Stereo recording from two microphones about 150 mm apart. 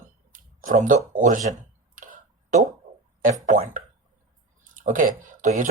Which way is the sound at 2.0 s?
60° right (ahead or behind).